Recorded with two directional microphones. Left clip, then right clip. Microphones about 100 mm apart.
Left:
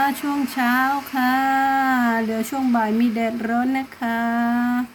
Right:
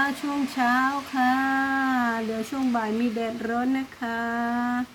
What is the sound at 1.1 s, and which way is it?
Female singing, 40° left (ahead or behind).